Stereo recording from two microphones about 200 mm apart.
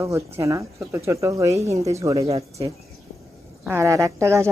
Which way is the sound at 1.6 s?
30° right (ahead or behind).